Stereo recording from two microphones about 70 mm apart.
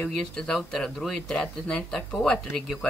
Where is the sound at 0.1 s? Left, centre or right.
Centre.